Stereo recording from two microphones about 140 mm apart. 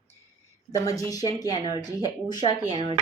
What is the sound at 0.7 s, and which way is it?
Speech, 25° left (ahead or behind).